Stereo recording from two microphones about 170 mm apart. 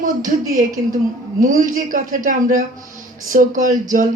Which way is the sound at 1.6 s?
50° right (ahead or behind).